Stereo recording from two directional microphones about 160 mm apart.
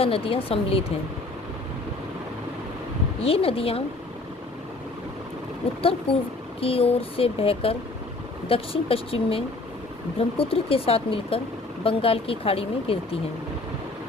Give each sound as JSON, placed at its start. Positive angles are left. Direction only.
{"t": 0.0, "sound": "speech", "side_deg": 35}
{"t": 3.2, "sound": "speech", "side_deg": 35}
{"t": 5.8, "sound": "speech", "side_deg": 35}